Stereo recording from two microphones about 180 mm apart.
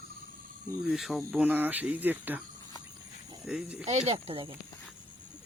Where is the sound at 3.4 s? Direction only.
5° right (ahead or behind).